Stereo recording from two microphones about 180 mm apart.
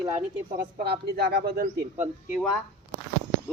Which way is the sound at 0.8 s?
60° right (ahead or behind).